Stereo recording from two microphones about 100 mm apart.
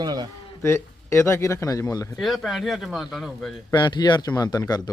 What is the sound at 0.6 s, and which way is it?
Speech, 25° left (ahead or behind).